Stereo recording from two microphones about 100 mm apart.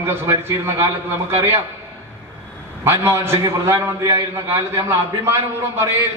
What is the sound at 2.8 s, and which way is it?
A man's voice, 25° right (ahead or behind).